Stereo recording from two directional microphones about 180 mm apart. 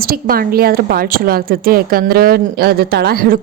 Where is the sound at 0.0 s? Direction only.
55° right (ahead or behind).